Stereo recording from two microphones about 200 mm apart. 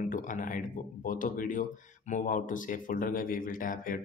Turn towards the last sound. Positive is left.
turn(degrees=45)  # may be behind; listen again after turning